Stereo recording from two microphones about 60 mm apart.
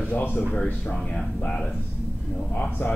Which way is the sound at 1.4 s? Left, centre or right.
Centre.